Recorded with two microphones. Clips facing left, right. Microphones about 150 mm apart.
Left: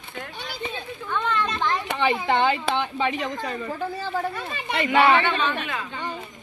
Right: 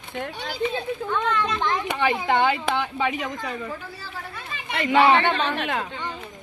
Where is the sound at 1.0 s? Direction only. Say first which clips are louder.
Left 1 dB; 10° right (ahead or behind).